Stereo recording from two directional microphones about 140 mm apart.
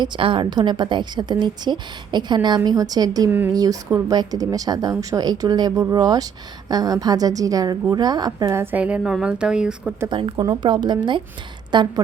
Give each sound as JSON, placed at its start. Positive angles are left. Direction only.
{"t": 0.0, "sound": "a woman's voice", "side_deg": -35}
{"t": 3.2, "sound": "speech", "side_deg": -15}
{"t": 3.5, "sound": "a woman's voice", "side_deg": -25}
{"t": 10.1, "sound": "a woman's voice", "side_deg": -35}